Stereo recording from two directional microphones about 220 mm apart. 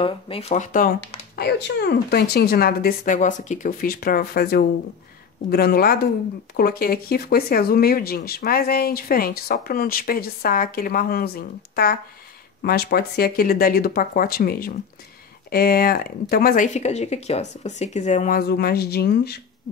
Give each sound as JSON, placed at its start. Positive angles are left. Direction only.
{"t": 0.0, "sound": "speech", "side_deg": 25}
{"t": 1.3, "sound": "speech", "side_deg": 50}